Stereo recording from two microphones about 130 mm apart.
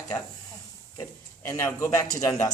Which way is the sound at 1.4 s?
25° left (ahead or behind).